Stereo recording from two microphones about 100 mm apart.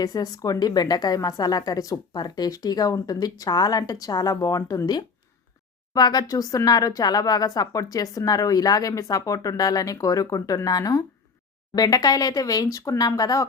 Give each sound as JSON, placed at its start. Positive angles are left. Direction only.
{"t": 0.0, "sound": "a woman's voice", "side_deg": 40}